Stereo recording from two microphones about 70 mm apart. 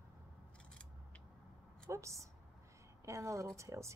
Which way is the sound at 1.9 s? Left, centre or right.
Right.